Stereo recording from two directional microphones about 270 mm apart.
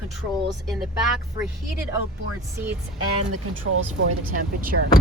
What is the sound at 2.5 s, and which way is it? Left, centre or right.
Speech, centre.